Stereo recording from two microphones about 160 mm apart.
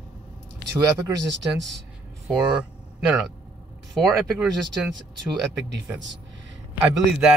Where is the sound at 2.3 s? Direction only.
5° right (ahead or behind).